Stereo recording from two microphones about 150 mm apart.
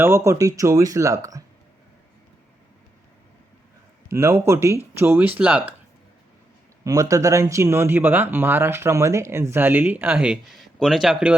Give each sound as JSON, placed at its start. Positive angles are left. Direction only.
{"t": 0.0, "sound": "speech", "side_deg": -15}
{"t": 4.1, "sound": "speech", "side_deg": -15}
{"t": 6.8, "sound": "speech", "side_deg": -20}